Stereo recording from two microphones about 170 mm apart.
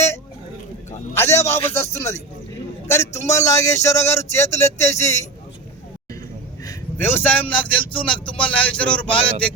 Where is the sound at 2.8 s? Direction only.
15° left (ahead or behind).